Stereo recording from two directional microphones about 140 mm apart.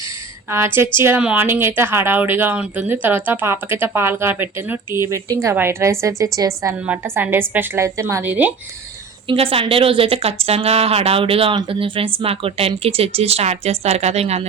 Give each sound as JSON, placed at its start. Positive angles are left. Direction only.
{"t": 0.5, "sound": "speech", "side_deg": -20}
{"t": 6.8, "sound": "speech", "side_deg": -15}
{"t": 9.2, "sound": "speech", "side_deg": -40}